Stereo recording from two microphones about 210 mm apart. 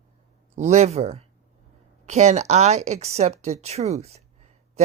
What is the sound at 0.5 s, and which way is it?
Speech, 35° right (ahead or behind).